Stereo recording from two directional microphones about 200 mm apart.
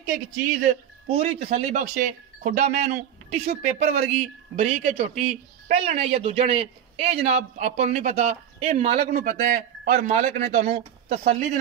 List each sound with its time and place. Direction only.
1.0 s speech: 30° right (ahead or behind)